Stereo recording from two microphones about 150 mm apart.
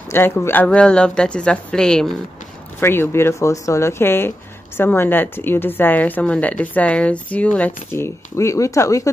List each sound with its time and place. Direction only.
0.1 s a woman's voice: 15° left (ahead or behind)
2.8 s a woman's voice: 15° left (ahead or behind)